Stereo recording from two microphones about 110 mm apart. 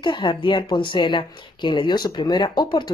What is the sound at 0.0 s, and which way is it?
Speech, 45° left (ahead or behind).